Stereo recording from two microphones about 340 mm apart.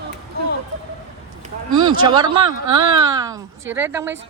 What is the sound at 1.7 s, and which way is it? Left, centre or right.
A man's voice, centre.